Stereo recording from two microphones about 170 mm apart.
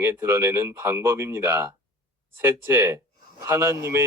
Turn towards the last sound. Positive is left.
turn(degrees=-15)  # may be behind; listen again after turning